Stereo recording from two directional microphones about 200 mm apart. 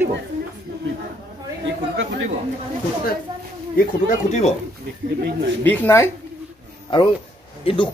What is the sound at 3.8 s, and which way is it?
Speech, 40° left (ahead or behind).